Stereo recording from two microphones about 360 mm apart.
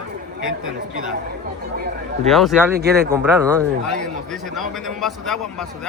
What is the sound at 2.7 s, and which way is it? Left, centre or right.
Speech, right.